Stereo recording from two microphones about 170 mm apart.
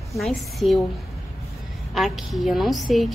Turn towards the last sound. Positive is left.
turn(degrees=0)  # may be behind; listen again after turning